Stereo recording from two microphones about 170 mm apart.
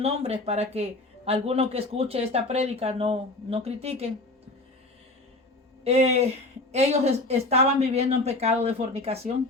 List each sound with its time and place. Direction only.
0.0 s speech: 35° right (ahead or behind)
5.8 s speech: 35° right (ahead or behind)